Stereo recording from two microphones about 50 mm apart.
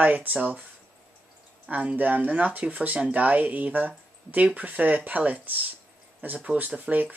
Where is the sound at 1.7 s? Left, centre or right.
Right.